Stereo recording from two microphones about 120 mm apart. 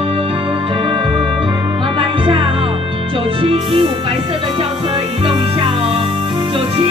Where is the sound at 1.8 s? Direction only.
45° right (ahead or behind).